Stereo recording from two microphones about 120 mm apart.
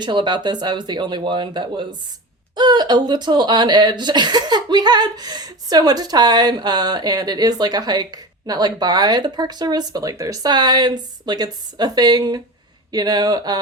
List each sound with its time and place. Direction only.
0.0 s speech: 40° right (ahead or behind)